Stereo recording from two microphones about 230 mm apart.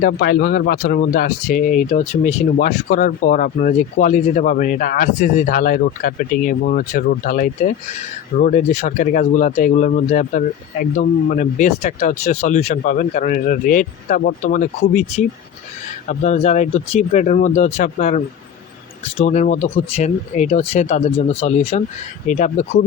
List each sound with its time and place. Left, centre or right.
0.0 s speech: left